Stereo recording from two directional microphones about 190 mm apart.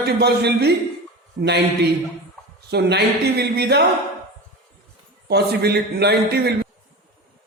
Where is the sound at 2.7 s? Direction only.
60° right (ahead or behind).